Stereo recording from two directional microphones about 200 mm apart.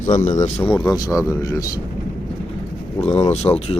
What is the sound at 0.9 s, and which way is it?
Speech, 15° left (ahead or behind).